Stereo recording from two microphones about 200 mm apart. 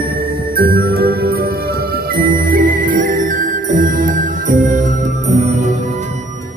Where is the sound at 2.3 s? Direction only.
45° right (ahead or behind).